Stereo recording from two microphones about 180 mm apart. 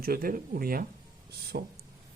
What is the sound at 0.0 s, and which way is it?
Speech, 55° right (ahead or behind).